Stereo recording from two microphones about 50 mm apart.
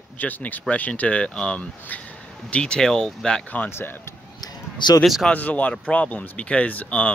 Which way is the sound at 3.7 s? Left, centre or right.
Left.